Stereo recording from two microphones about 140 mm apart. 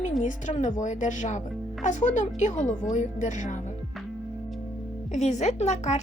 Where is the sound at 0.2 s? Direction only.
60° left (ahead or behind).